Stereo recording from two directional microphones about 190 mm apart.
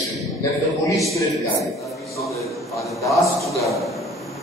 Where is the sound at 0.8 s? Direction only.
15° left (ahead or behind).